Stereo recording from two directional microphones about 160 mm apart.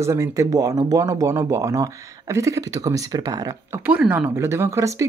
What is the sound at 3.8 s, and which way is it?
Speech, 10° right (ahead or behind).